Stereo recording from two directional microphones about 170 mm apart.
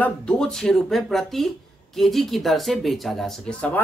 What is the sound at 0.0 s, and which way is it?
Speech, 5° left (ahead or behind).